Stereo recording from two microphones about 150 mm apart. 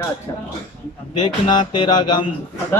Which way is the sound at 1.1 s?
30° left (ahead or behind).